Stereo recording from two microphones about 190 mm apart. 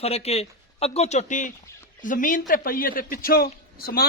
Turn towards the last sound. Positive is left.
turn(degrees=55)  # may be behind; listen again after turning